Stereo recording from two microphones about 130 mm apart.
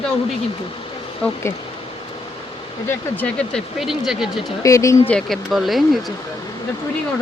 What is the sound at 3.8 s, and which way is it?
Speech, 5° right (ahead or behind).